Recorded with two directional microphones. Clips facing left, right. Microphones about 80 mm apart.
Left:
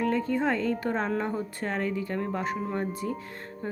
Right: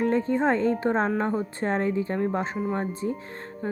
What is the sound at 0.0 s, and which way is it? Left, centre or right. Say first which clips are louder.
A woman's voice: right 3 dB; right.